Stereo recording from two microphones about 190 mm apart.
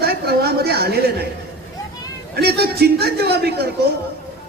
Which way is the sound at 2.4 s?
55° right (ahead or behind).